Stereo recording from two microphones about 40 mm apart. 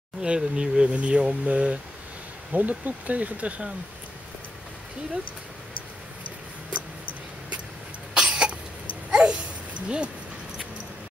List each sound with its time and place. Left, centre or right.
0.2 s speech: right
2.5 s speech: right
8.1 s cough: right
9.1 s dog: right